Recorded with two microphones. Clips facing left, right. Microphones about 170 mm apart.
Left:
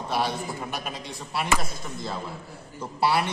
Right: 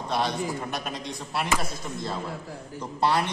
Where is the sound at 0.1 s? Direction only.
5° left (ahead or behind).